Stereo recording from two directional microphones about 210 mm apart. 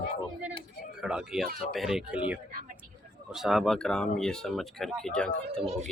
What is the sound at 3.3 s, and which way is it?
Speech, centre (ahead or behind).